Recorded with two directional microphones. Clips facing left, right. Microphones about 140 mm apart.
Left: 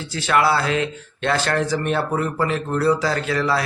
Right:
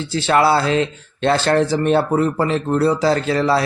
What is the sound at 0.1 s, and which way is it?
Speech, 30° right (ahead or behind).